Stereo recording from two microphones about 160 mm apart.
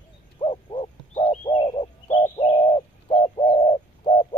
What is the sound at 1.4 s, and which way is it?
Bird, 30° left (ahead or behind).